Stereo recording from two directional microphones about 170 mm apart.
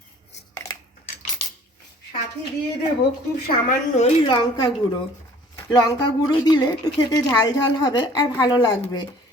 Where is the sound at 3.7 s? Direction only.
45° left (ahead or behind).